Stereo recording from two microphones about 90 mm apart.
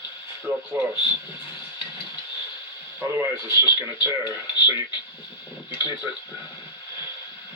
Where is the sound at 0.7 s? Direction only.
25° right (ahead or behind).